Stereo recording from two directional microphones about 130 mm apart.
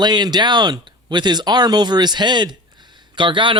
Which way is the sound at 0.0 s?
35° right (ahead or behind).